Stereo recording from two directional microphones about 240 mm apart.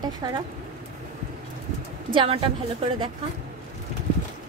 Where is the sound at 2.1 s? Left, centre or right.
Right.